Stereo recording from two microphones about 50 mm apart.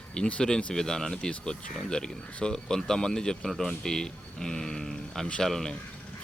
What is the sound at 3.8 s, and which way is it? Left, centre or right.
Speech, centre.